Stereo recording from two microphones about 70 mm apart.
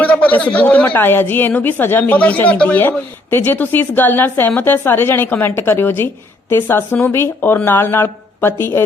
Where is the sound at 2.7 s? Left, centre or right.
Left.